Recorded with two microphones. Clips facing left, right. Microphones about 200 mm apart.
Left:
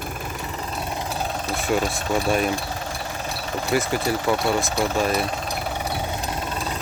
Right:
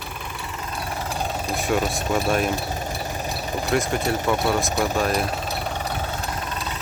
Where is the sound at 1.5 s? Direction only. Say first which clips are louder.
Even; centre (ahead or behind).